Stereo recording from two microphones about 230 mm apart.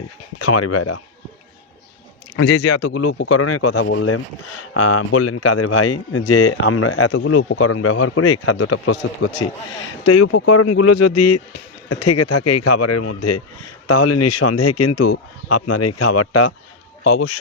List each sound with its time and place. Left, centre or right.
0.3 s speech: left
2.4 s speech: left
2.6 s speech: left
3.2 s speech: left
3.8 s speech: left
10.1 s speech: left
17.0 s speech: left